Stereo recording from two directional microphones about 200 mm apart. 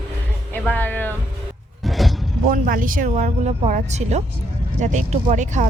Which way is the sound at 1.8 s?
Centre (ahead or behind).